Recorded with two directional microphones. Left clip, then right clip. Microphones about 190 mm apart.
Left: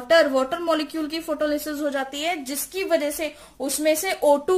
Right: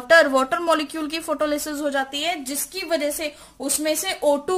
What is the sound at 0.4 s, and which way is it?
A woman's voice, 35° right (ahead or behind).